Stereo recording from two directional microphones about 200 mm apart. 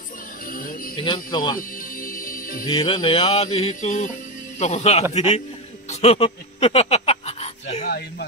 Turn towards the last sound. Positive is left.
turn(degrees=30)  # may be behind; listen again after turning